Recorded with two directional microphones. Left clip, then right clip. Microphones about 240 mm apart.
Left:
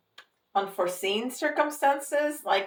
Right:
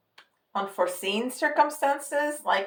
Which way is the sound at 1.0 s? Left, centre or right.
Right.